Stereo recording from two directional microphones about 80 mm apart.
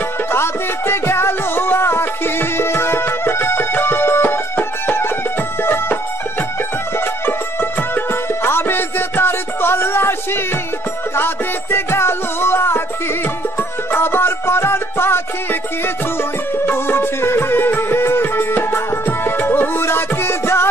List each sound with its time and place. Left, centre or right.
0.3 s music: left
7.9 s music: left
16.5 s music: left